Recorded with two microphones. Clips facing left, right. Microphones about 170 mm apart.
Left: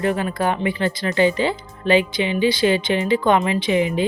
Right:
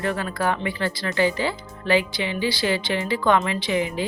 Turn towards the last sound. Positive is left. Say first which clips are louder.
# left 5 dB
turn(degrees=20)  # may be behind; listen again after turning